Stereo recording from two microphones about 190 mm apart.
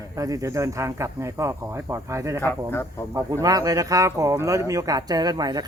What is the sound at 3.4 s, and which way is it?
Speech, 20° right (ahead or behind).